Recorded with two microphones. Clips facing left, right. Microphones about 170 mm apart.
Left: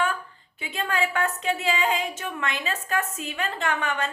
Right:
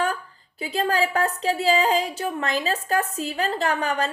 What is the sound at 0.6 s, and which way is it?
A woman's voice, 35° right (ahead or behind).